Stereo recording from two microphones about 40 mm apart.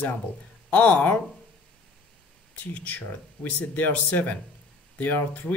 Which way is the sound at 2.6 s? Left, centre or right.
Left.